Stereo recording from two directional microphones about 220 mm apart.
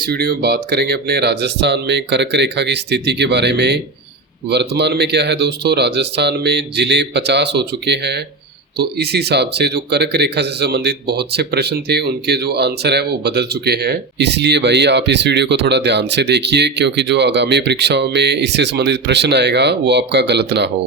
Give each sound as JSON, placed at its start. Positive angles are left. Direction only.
{"t": 0.0, "sound": "speech", "side_deg": -40}